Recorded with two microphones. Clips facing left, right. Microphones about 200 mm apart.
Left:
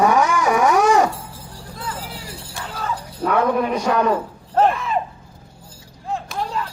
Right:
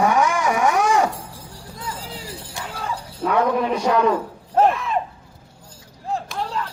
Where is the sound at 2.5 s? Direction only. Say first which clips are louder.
Left 2 dB; 15° right (ahead or behind).